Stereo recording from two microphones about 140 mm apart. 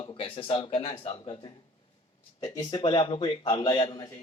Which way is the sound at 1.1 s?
30° left (ahead or behind).